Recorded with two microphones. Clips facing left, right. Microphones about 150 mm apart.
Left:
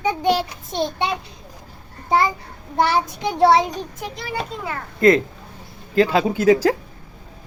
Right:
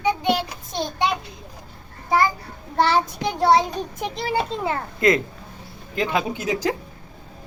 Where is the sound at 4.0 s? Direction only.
25° right (ahead or behind).